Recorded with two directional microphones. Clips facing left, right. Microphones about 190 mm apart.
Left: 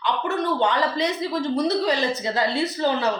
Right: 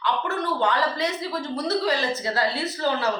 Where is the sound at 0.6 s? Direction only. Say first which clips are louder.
Left 2 dB; 20° left (ahead or behind).